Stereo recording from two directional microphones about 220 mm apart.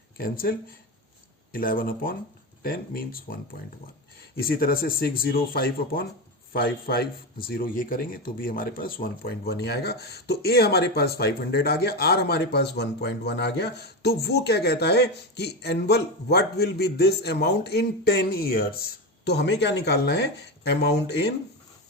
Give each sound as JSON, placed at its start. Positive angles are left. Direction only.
{"t": 0.2, "sound": "speech", "side_deg": 40}
{"t": 1.5, "sound": "speech", "side_deg": 40}
{"t": 4.4, "sound": "speech", "side_deg": 40}